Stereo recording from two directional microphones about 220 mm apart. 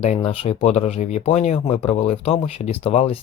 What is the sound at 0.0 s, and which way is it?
Speech, 30° left (ahead or behind).